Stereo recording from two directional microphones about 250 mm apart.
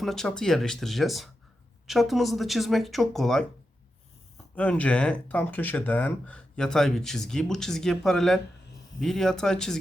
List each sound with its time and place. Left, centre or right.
0.0 s speech: centre
4.5 s speech: centre